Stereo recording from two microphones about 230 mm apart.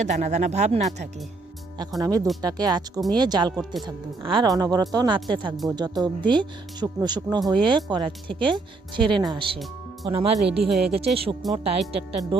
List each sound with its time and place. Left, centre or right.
0.0 s speech: right
2.0 s speech: centre
10.7 s speech: centre
11.0 s speech: right